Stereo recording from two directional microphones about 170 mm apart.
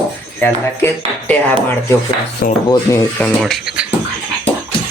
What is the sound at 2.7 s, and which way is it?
Speech, 20° left (ahead or behind).